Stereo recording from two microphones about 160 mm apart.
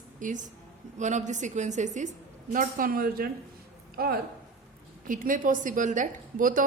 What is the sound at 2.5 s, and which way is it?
A woman's voice, 60° right (ahead or behind).